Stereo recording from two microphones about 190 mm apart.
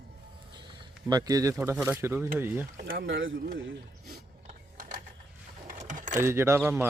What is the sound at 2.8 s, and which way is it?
Speech, 50° right (ahead or behind).